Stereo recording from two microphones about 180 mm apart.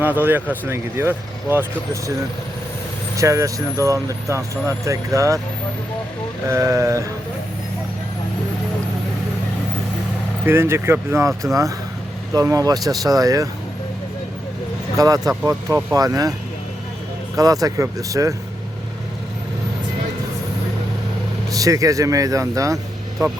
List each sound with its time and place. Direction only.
0.0 s speech: 10° right (ahead or behind)
3.2 s speech: 15° right (ahead or behind)
6.5 s speech: 15° right (ahead or behind)
10.4 s speech: 15° right (ahead or behind)
12.3 s speech: 20° right (ahead or behind)
14.9 s speech: 20° right (ahead or behind)
17.3 s speech: 20° right (ahead or behind)
21.5 s speech: 20° right (ahead or behind)